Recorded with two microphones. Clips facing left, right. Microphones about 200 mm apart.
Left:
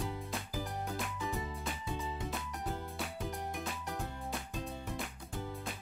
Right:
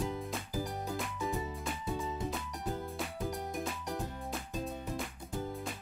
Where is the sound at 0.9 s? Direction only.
Centre (ahead or behind).